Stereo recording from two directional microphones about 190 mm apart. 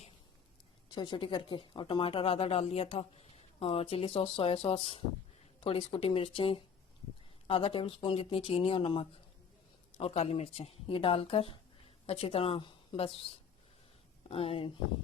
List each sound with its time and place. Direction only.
0.9 s a woman's voice: 25° left (ahead or behind)
14.3 s speech: 30° left (ahead or behind)